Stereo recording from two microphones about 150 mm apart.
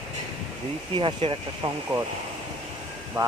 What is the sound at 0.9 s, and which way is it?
Speech, 35° right (ahead or behind).